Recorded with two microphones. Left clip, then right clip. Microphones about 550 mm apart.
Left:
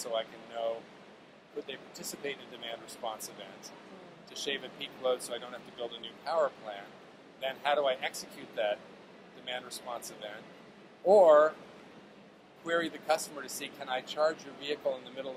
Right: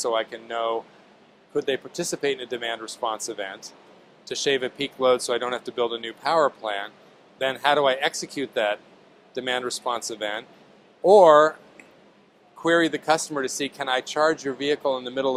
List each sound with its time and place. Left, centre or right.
0.0 s speech: right
12.6 s speech: right